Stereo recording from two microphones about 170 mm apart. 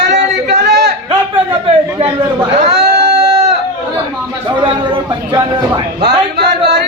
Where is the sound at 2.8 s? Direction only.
70° right (ahead or behind).